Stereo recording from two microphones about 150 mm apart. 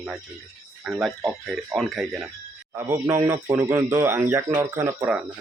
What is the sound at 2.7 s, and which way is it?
Speech, 15° right (ahead or behind).